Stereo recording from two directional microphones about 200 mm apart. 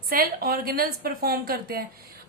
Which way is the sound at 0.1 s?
50° right (ahead or behind).